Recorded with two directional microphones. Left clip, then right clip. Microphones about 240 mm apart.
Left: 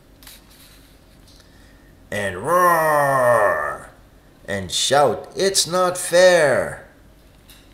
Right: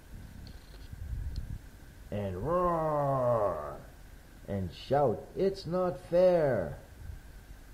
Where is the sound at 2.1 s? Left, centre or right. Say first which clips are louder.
Left 13 dB; centre.